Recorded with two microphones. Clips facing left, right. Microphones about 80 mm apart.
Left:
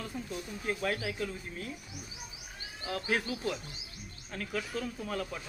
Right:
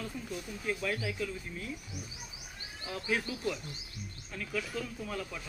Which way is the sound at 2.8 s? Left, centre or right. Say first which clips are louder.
Left 2 dB; left.